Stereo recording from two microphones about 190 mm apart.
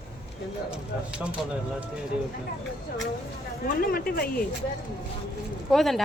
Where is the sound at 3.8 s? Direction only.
50° left (ahead or behind).